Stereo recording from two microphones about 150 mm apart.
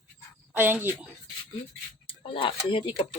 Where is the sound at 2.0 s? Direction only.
35° left (ahead or behind).